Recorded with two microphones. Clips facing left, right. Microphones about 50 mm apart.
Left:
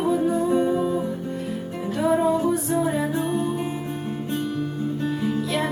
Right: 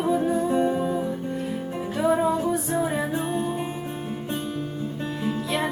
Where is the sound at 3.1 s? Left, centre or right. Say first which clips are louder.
Left 2 dB; centre.